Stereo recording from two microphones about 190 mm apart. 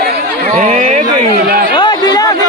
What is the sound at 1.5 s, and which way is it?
Chatter, 50° right (ahead or behind).